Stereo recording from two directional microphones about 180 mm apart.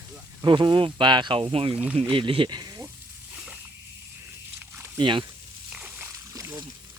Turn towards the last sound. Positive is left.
turn(degrees=-15)  # may be behind; listen again after turning